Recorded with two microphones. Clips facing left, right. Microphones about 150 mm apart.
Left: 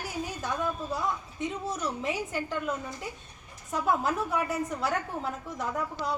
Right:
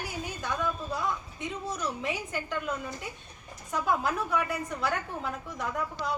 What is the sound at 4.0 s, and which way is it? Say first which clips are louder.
Speech: left 1 dB; 30° left (ahead or behind).